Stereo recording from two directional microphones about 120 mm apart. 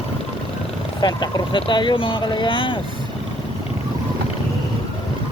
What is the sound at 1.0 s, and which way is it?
Speech, 40° left (ahead or behind).